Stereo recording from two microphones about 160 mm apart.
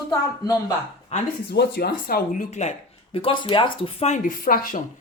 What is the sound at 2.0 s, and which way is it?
Speech, 70° left (ahead or behind).